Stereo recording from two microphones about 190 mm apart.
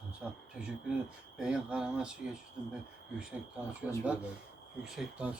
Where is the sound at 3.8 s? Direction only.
5° right (ahead or behind).